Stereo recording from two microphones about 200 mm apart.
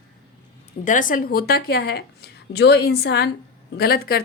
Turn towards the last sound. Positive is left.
turn(degrees=50)  # may be behind; listen again after turning